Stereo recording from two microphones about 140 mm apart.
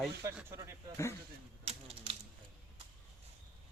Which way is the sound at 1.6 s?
45° right (ahead or behind).